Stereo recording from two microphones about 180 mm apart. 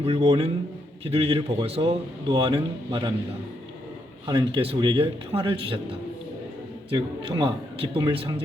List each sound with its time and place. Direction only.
0.0 s a man's voice: 35° right (ahead or behind)
4.3 s a man's voice: 25° right (ahead or behind)